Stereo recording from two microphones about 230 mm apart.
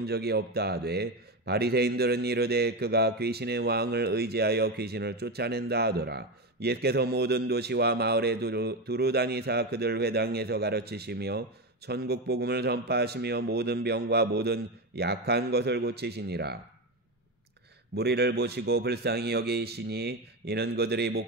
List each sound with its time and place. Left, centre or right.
0.0 s a man's voice: right
17.9 s a man's voice: right